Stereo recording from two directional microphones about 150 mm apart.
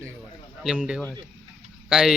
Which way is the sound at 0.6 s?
5° right (ahead or behind).